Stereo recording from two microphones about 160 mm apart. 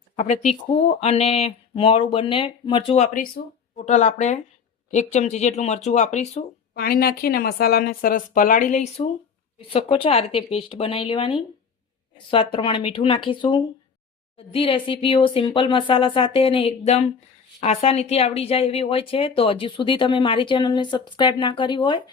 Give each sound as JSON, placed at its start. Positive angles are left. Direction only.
{"t": 0.2, "sound": "a woman's voice", "side_deg": 45}
{"t": 6.7, "sound": "a woman's voice", "side_deg": 70}
{"t": 9.6, "sound": "a woman's voice", "side_deg": 35}